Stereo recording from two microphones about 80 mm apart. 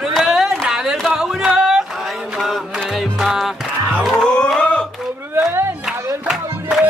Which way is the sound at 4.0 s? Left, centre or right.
Centre.